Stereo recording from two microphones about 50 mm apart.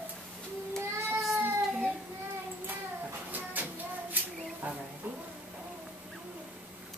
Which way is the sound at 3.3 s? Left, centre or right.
Right.